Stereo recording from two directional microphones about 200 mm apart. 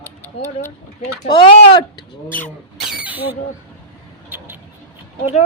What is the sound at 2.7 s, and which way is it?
Speech, 5° right (ahead or behind).